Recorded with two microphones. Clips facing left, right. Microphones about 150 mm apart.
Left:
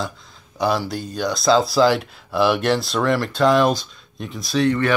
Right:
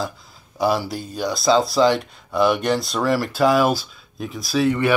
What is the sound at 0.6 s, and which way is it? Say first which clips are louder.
Speech: even; centre (ahead or behind).